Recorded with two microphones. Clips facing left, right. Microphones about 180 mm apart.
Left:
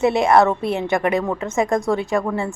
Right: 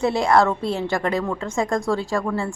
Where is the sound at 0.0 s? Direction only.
20° left (ahead or behind).